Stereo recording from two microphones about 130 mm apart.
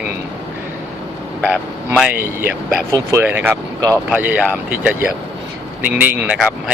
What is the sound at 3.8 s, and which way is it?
Speech, 25° right (ahead or behind).